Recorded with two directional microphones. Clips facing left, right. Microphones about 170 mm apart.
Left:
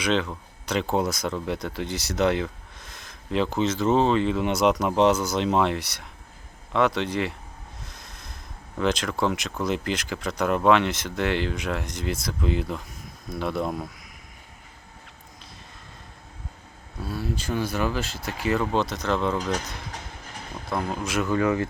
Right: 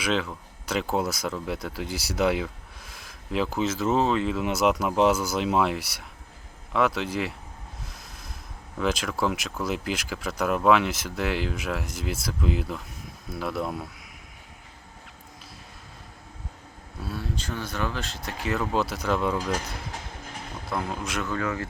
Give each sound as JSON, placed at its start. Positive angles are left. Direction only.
{"t": 0.0, "sound": "speech", "side_deg": -5}
{"t": 7.9, "sound": "a sound", "side_deg": -5}
{"t": 8.8, "sound": "speech", "side_deg": -5}
{"t": 17.0, "sound": "speech", "side_deg": 0}
{"t": 20.7, "sound": "speech", "side_deg": 0}
{"t": 21.2, "sound": "speech", "side_deg": 20}